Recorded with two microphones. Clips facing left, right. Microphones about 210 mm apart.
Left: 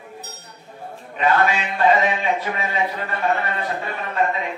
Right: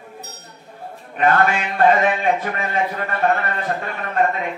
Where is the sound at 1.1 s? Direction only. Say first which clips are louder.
Right 2 dB; 50° right (ahead or behind).